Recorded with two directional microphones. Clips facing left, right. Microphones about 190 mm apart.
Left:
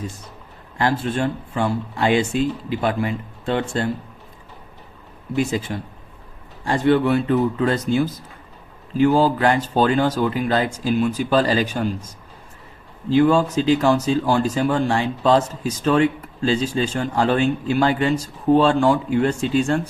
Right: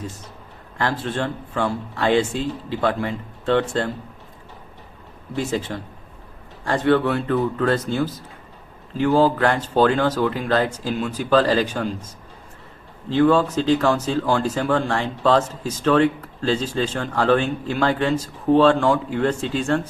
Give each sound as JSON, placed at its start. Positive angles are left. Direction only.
{"t": 0.8, "sound": "speech", "side_deg": 15}
{"t": 5.4, "sound": "speech", "side_deg": 15}
{"t": 6.7, "sound": "speech", "side_deg": 15}
{"t": 13.1, "sound": "speech", "side_deg": 15}